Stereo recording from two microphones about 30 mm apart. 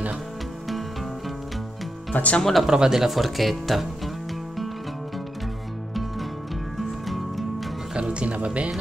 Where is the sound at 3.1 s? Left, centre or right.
Centre.